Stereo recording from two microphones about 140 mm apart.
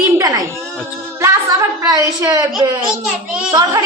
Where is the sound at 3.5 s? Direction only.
25° right (ahead or behind).